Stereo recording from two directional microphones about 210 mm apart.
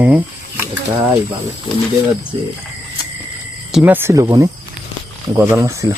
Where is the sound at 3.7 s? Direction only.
5° right (ahead or behind).